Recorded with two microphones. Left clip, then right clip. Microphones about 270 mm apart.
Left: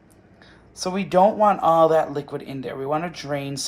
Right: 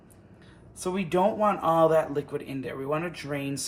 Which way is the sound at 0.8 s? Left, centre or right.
Left.